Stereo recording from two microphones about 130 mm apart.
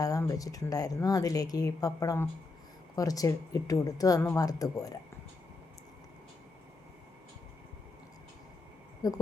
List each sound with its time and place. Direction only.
0.0 s speech: 25° left (ahead or behind)
9.0 s speech: 30° left (ahead or behind)